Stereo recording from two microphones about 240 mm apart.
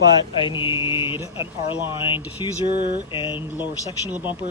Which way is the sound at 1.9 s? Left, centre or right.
Left.